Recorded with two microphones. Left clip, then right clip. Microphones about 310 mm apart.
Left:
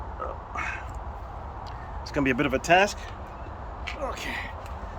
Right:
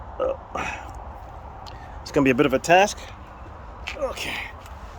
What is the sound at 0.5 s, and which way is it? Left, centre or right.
Throat clearing, right.